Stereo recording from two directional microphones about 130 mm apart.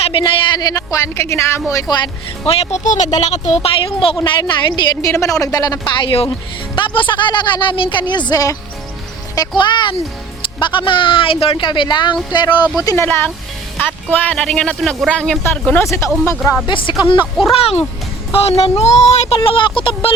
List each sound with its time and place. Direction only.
0.1 s a woman's voice: 35° left (ahead or behind); by 1.6 s 20° left (ahead or behind)
1.7 s a woman's voice: 35° left (ahead or behind)
2.5 s speech: 50° left (ahead or behind)
2.8 s speech: 70° left (ahead or behind)
3.2 s speech: 60° left (ahead or behind)
4.2 s a woman's voice: 35° left (ahead or behind)
9.6 s a woman's voice: 35° left (ahead or behind)
13.1 s speech: 15° left (ahead or behind)
16.6 s a woman's voice: 40° left (ahead or behind)
17.5 s speech: 50° left (ahead or behind)
19.4 s a woman's voice: 40° left (ahead or behind)